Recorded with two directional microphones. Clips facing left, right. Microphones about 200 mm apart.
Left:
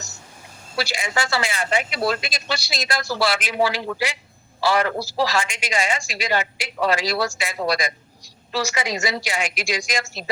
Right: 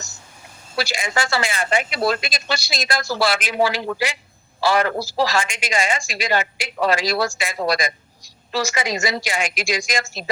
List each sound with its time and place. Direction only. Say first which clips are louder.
0.9 s a man's voice: right 2 dB; 50° right (ahead or behind)